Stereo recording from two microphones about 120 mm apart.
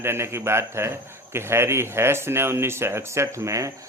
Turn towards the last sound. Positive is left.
turn(degrees=-25)  # may be behind; listen again after turning